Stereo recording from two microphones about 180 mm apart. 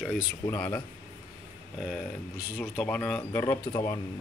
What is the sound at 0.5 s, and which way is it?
Speech, 15° left (ahead or behind).